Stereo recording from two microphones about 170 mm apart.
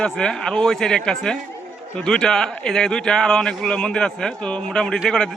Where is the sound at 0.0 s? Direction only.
5° left (ahead or behind).